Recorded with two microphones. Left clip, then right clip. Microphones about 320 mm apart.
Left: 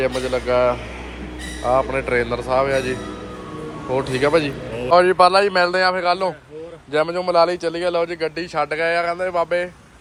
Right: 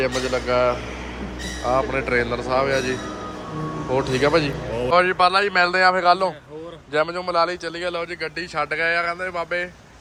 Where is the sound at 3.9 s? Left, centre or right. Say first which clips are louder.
Left 1 dB; centre.